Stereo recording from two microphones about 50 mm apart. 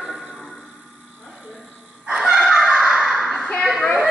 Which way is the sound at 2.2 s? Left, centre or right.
Centre.